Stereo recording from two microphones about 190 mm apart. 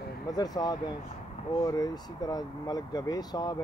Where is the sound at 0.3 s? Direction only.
20° left (ahead or behind).